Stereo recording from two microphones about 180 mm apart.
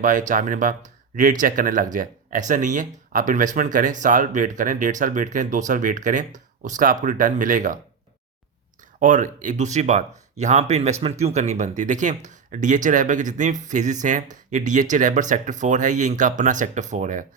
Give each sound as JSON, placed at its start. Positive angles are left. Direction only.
{"t": 0.0, "sound": "speech", "side_deg": -45}
{"t": 9.0, "sound": "speech", "side_deg": -45}